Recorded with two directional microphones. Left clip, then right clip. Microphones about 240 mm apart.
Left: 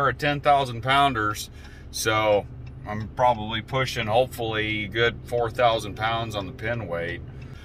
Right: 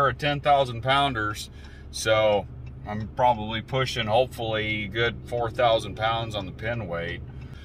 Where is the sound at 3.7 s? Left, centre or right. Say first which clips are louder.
Even; centre.